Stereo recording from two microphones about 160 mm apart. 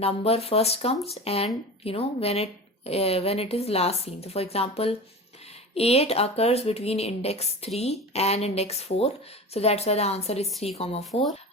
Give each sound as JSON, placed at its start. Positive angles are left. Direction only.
{"t": 0.0, "sound": "a woman's voice", "side_deg": 40}
{"t": 11.0, "sound": "speech", "side_deg": 0}